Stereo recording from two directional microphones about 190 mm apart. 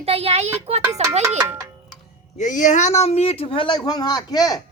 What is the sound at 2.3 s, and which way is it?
A man's voice, 40° left (ahead or behind).